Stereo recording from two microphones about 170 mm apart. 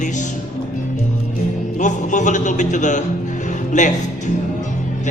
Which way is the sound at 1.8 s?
45° left (ahead or behind).